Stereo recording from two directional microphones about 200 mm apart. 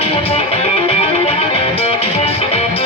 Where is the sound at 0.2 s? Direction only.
30° left (ahead or behind).